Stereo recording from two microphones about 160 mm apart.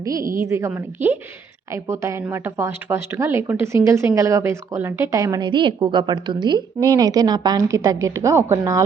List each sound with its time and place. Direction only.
0.0 s a woman's voice: 20° right (ahead or behind)